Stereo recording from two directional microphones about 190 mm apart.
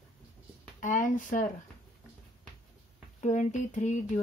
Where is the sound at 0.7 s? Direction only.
45° left (ahead or behind).